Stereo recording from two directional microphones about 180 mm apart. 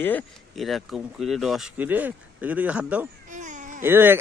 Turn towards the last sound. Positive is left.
turn(degrees=-10)  # may be behind; listen again after turning